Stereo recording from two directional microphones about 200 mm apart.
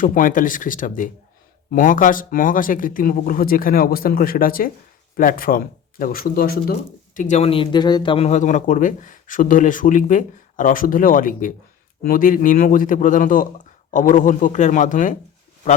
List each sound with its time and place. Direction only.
0.0 s speech: 45° left (ahead or behind)